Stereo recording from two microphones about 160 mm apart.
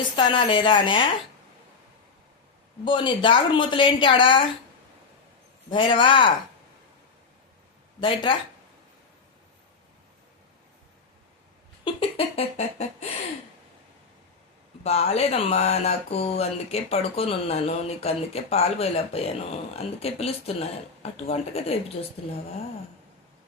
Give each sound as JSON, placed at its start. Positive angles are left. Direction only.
{"t": 0.2, "sound": "speech", "side_deg": 30}
{"t": 2.8, "sound": "speech", "side_deg": 30}
{"t": 5.7, "sound": "speech", "side_deg": 30}
{"t": 8.0, "sound": "speech", "side_deg": 30}
{"t": 11.9, "sound": "speech", "side_deg": 35}
{"t": 14.8, "sound": "speech", "side_deg": 40}